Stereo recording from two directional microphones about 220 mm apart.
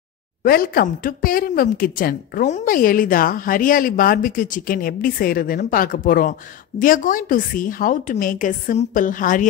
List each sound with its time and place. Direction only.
0.4 s a woman's voice: 45° left (ahead or behind)